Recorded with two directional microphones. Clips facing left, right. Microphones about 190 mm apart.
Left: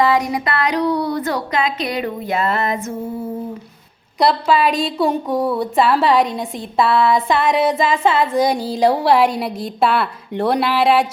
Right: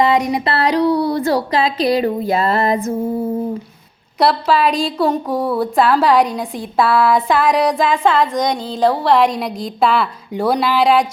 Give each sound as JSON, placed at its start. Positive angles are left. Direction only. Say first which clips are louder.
{"t": 0.0, "sound": "a sound", "louder": "right 2 dB", "side_deg": -20}
{"t": 0.9, "sound": "speech", "louder": "right 4 dB", "side_deg": -30}
{"t": 4.2, "sound": "speech", "louder": "right 1 dB", "side_deg": 0}